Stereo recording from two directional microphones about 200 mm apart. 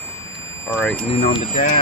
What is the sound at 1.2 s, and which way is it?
Speech, 35° left (ahead or behind).